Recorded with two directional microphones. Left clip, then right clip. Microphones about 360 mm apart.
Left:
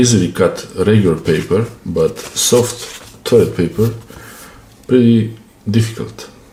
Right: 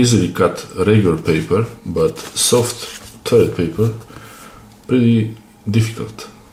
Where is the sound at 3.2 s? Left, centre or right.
Centre.